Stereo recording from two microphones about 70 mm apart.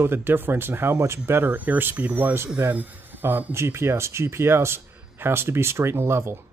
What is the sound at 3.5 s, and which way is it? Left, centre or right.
Speech, right.